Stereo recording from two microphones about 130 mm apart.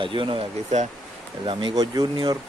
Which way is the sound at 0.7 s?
65° right (ahead or behind).